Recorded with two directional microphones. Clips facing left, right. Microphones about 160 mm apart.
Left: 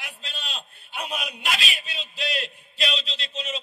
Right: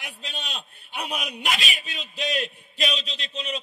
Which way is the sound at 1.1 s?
40° right (ahead or behind).